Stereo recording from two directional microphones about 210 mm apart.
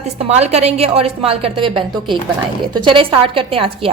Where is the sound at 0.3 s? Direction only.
30° right (ahead or behind).